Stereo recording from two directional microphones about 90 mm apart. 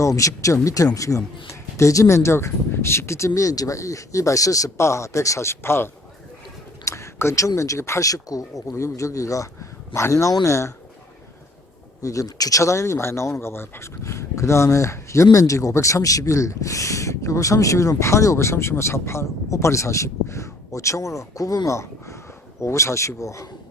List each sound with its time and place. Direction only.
0.0 s speech: 35° left (ahead or behind)
12.0 s speech: 40° left (ahead or behind)